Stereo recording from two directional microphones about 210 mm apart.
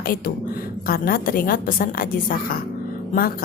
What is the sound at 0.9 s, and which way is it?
A woman's voice, 45° left (ahead or behind).